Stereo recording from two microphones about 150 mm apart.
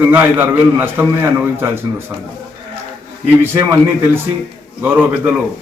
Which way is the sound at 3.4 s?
15° right (ahead or behind).